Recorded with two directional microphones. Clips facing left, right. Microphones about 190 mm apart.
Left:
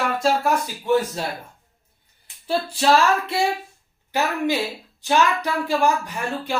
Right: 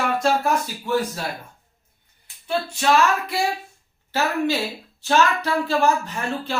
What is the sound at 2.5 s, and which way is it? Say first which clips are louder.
Female singing: left 2 dB; 35° left (ahead or behind).